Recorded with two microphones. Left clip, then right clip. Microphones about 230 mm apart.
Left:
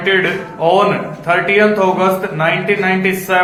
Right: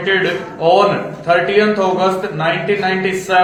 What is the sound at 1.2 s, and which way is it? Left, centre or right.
A man's voice, left.